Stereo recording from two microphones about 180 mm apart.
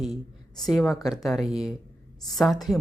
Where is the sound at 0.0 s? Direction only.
Centre (ahead or behind).